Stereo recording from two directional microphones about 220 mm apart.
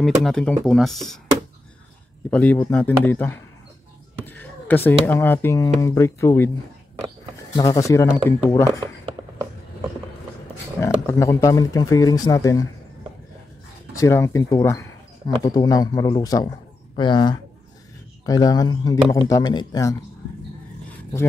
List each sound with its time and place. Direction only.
0.2 s speech: 5° left (ahead or behind)
2.3 s speech: 5° left (ahead or behind)
7.5 s speech: 15° left (ahead or behind)
11.1 s speech: 15° left (ahead or behind)
13.9 s speech: 15° left (ahead or behind)